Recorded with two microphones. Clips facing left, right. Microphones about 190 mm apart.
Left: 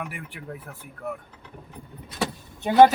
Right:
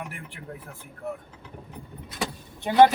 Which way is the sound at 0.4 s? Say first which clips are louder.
Left 3 dB; 90° left.